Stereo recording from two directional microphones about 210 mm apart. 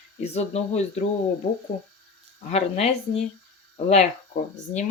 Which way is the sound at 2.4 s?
30° left (ahead or behind).